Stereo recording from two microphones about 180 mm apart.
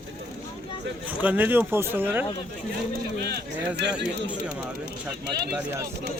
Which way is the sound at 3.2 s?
65° right (ahead or behind).